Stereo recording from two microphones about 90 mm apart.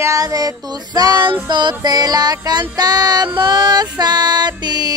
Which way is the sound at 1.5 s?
55° right (ahead or behind).